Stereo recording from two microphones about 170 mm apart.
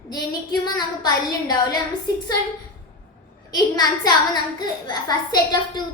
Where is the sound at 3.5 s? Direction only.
25° left (ahead or behind).